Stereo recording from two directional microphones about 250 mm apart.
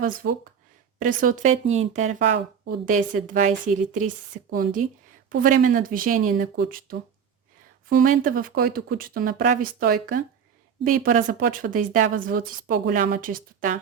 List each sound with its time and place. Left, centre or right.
0.0 s a woman's voice: right
4.5 s a woman's voice: right